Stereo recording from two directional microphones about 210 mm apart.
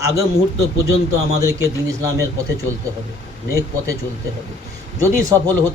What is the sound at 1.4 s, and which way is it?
Speech, 15° right (ahead or behind).